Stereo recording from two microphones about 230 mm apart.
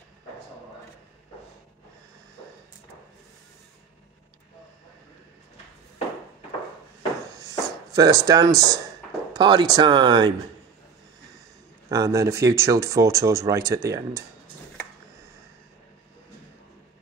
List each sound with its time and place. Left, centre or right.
7.3 s chopping: centre
8.5 s speech: centre
11.9 s speech: centre